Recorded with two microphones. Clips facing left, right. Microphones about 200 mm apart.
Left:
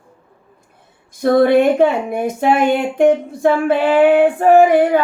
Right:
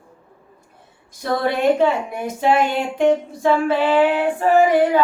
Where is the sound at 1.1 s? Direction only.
55° left (ahead or behind).